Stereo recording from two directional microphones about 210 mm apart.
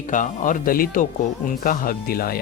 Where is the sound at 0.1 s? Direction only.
40° left (ahead or behind).